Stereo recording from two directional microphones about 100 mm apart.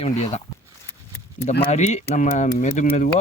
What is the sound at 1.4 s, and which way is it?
Speech, 85° left.